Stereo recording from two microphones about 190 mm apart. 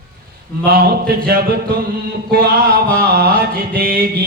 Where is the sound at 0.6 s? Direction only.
55° right (ahead or behind).